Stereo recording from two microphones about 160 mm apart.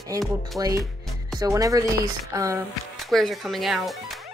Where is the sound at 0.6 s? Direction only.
20° right (ahead or behind).